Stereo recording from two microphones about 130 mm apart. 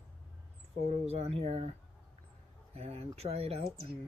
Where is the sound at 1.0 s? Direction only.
55° right (ahead or behind).